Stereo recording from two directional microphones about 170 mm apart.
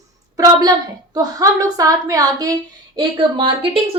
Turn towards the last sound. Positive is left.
turn(degrees=-30)  # may be behind; listen again after turning